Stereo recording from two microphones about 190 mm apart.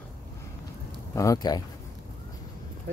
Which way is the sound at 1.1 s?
15° left (ahead or behind).